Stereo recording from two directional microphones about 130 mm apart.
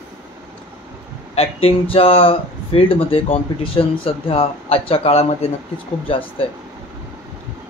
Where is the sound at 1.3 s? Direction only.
50° left (ahead or behind).